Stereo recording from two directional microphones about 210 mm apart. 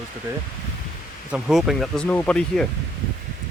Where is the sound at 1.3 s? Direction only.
Centre (ahead or behind).